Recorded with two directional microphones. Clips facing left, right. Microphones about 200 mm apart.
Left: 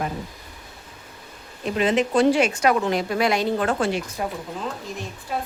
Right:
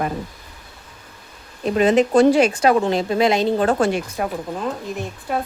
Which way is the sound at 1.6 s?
40° right (ahead or behind).